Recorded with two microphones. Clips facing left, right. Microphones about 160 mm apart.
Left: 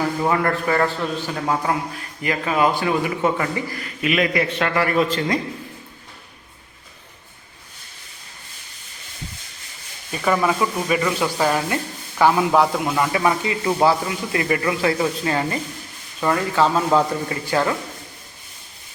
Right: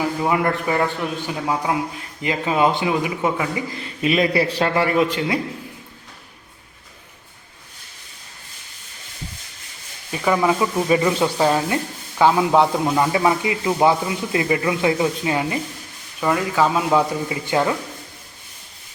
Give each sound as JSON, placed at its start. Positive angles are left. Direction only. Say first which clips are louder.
{"t": 0.0, "sound": "speech", "louder": "even", "side_deg": -10}
{"t": 2.0, "sound": "a man's voice", "louder": "even", "side_deg": -20}
{"t": 3.7, "sound": "a man's voice", "louder": "right 2 dB", "side_deg": -25}
{"t": 10.1, "sound": "a man's voice", "louder": "right 1 dB", "side_deg": -10}